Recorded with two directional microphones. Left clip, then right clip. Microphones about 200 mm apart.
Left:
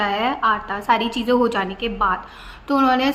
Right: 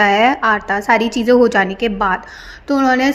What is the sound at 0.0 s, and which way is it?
A woman's voice, 30° right (ahead or behind).